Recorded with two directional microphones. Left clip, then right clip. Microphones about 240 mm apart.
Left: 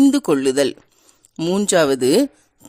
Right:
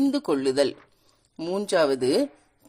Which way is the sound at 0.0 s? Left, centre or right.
Left.